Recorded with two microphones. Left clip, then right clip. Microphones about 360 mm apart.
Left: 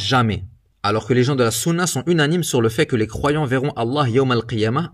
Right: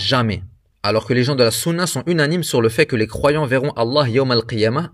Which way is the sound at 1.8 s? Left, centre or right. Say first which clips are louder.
Even; centre.